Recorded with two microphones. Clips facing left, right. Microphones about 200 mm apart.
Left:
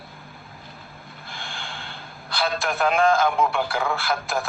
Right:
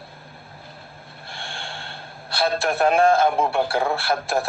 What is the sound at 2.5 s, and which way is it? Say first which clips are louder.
A man's voice: right 4 dB; 30° right (ahead or behind).